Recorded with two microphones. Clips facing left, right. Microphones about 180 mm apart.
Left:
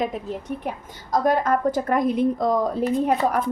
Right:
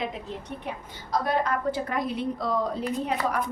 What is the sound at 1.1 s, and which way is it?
A woman's voice, 45° left (ahead or behind).